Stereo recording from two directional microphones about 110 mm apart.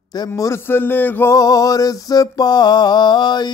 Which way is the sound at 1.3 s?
35° left (ahead or behind).